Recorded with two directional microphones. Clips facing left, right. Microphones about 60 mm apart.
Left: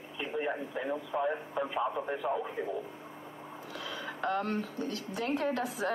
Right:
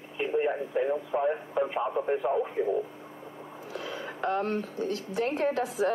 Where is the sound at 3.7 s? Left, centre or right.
Right.